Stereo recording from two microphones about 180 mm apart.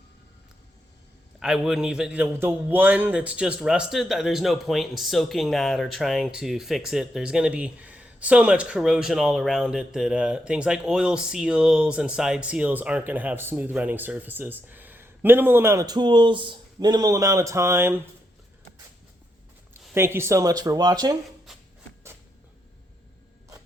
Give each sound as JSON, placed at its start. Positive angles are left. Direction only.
{"t": 1.4, "sound": "a man's voice", "side_deg": -5}
{"t": 19.9, "sound": "speech", "side_deg": -15}